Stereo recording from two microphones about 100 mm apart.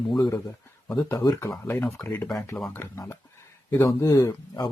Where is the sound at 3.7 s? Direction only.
30° left (ahead or behind).